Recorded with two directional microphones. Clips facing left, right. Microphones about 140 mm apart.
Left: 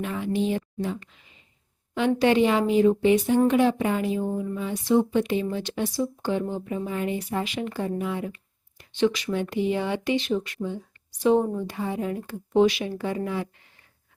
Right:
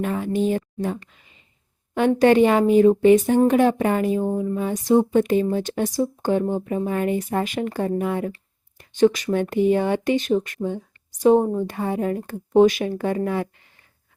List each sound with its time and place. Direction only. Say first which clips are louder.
0.0 s speech: right 4 dB; 45° right (ahead or behind)
2.0 s speech: right 5 dB; 50° right (ahead or behind)